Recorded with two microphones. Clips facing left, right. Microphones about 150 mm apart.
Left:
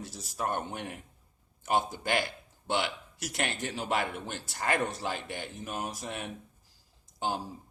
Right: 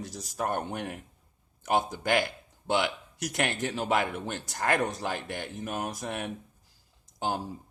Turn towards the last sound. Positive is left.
turn(degrees=-50)  # may be behind; listen again after turning